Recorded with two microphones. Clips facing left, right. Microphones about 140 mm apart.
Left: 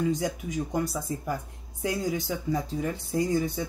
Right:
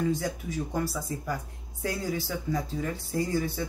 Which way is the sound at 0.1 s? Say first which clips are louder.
Left 1 dB; 15° left (ahead or behind).